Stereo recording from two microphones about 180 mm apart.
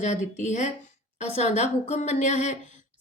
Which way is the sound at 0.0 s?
40° left (ahead or behind).